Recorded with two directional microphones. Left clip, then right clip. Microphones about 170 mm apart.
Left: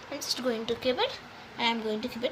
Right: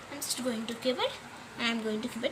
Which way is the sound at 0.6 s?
60° left (ahead or behind).